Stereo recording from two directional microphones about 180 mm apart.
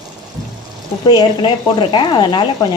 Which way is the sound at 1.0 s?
25° left (ahead or behind).